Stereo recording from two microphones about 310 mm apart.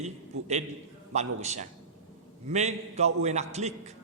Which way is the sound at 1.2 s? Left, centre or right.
Right.